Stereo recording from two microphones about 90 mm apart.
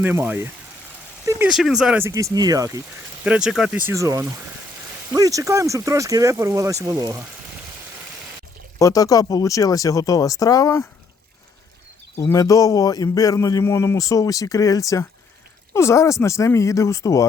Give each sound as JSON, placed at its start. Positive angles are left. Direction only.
{"t": 0.0, "sound": "speech", "side_deg": -20}
{"t": 1.5, "sound": "speech", "side_deg": -5}
{"t": 2.0, "sound": "speech", "side_deg": -35}
{"t": 3.2, "sound": "speech", "side_deg": -10}
{"t": 3.9, "sound": "speech", "side_deg": -35}
{"t": 8.8, "sound": "a man's voice", "side_deg": 40}
{"t": 12.1, "sound": "a man's voice", "side_deg": 25}
{"t": 12.4, "sound": "a man's voice", "side_deg": 45}